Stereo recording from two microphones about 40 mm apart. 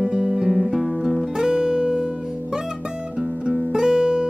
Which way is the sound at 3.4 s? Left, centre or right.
Centre.